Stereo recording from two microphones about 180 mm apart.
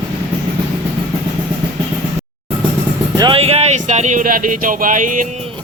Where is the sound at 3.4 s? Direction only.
35° right (ahead or behind).